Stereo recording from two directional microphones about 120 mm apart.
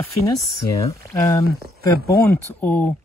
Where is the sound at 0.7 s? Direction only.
25° left (ahead or behind).